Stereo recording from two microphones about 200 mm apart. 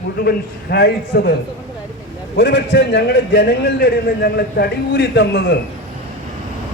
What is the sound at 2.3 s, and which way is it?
A man's voice, 60° left (ahead or behind).